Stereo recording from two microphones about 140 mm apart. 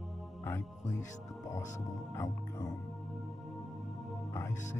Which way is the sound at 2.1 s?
25° left (ahead or behind).